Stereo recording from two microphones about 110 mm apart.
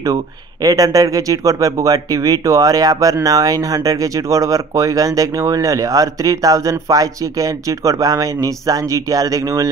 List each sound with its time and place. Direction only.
0.0 s speech: 35° right (ahead or behind)